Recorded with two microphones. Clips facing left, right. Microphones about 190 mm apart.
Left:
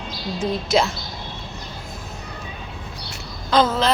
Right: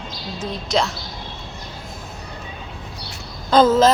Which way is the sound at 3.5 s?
50° right (ahead or behind).